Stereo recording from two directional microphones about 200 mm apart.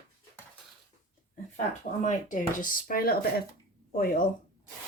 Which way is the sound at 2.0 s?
40° left (ahead or behind).